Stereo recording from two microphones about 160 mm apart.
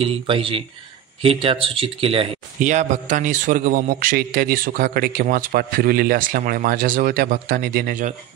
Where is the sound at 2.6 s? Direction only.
50° right (ahead or behind).